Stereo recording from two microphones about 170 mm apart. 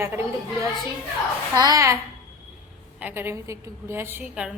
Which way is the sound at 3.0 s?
10° right (ahead or behind).